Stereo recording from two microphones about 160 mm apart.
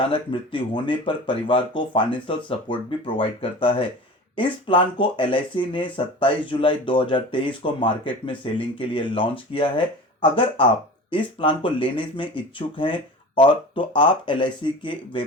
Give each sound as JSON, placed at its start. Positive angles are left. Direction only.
{"t": 0.0, "sound": "speech", "side_deg": 30}